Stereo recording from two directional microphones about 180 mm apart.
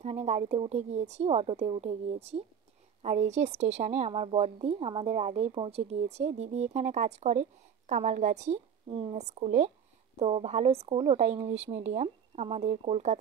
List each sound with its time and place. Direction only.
0.0 s a woman's voice: 35° right (ahead or behind)